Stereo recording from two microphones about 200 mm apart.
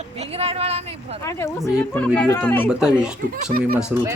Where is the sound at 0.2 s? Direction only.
30° right (ahead or behind).